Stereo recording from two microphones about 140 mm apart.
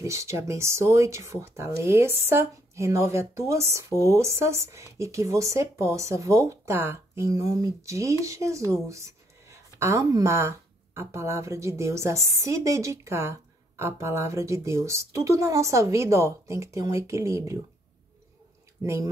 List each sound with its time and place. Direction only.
0.0 s speech: 20° right (ahead or behind)
18.8 s speech: 20° right (ahead or behind)